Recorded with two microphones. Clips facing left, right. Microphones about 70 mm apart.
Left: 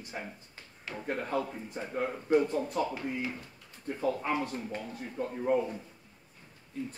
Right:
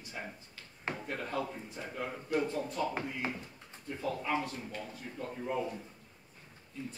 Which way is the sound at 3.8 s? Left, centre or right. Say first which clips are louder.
Left 5 dB; left.